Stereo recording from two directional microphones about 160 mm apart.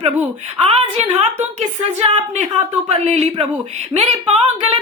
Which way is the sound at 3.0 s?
40° right (ahead or behind).